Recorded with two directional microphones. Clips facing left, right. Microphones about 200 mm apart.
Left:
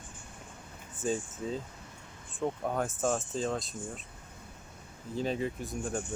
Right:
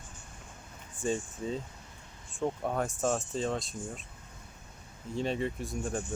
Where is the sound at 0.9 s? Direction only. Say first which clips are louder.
Even; centre (ahead or behind).